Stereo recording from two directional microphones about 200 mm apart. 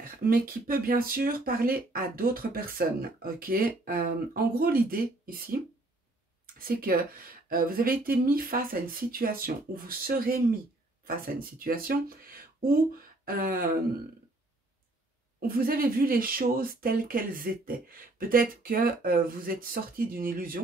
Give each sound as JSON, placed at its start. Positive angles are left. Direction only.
{"t": 0.0, "sound": "speech", "side_deg": -45}
{"t": 15.4, "sound": "speech", "side_deg": -45}